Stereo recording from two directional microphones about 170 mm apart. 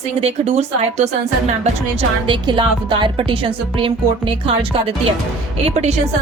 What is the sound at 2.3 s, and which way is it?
Speech, 30° right (ahead or behind).